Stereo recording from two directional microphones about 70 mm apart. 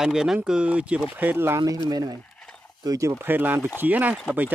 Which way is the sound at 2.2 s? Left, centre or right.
Centre.